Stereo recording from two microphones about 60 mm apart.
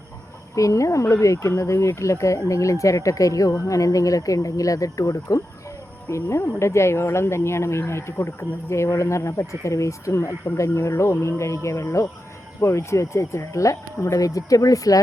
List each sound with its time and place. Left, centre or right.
0.5 s speech: left
6.1 s speech: left